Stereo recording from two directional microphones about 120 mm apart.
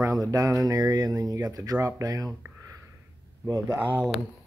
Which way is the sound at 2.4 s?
25° right (ahead or behind).